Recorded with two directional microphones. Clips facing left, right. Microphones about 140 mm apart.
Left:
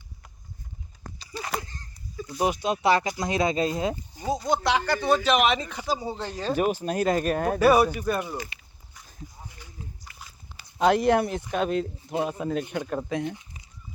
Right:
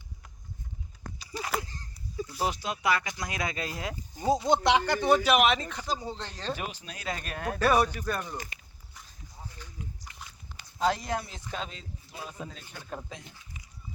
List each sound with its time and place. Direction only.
1.2 s a sound: 5° right (ahead or behind)
2.4 s speech: 20° left (ahead or behind)
4.4 s speech: 25° right (ahead or behind); by 6.6 s 10° left (ahead or behind)
6.6 s speech: 45° left (ahead or behind)
7.6 s speech: 10° left (ahead or behind)
9.5 s a sound: 10° left (ahead or behind)
10.2 s dog: 5° left (ahead or behind)
10.8 s speech: 65° left (ahead or behind)